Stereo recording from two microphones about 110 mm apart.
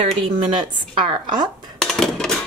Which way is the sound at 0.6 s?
45° right (ahead or behind).